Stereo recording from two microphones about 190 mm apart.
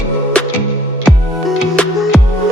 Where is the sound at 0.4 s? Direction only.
5° left (ahead or behind).